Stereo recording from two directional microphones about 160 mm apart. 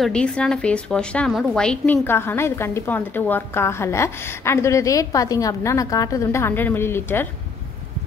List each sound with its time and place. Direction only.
0.0 s a woman's voice: 5° left (ahead or behind)